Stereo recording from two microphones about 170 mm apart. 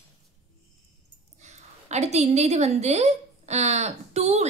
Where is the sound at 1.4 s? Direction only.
40° right (ahead or behind).